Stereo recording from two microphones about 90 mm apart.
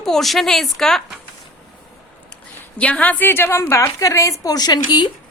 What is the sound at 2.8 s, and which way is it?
A woman's voice, 15° left (ahead or behind).